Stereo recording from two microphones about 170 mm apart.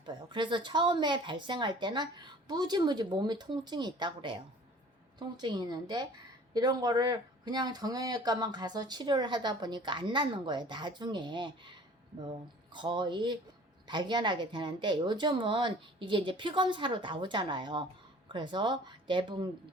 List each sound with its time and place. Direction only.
0.0 s speech: 25° right (ahead or behind)